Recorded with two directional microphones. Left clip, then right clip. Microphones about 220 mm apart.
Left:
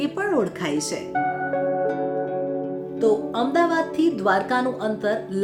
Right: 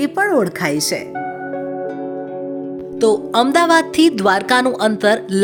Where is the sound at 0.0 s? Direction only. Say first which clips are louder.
Right 7 dB; 40° right (ahead or behind).